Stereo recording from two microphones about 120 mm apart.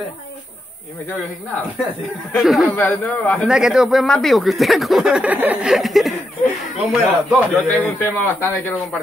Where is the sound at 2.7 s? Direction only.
15° left (ahead or behind); by 5.7 s 15° right (ahead or behind).